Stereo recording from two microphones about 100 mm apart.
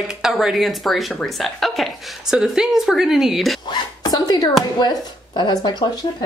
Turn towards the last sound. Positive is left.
turn(degrees=45)  # may be behind; listen again after turning